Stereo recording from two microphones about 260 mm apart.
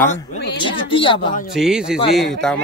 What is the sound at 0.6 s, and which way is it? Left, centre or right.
Speech, centre.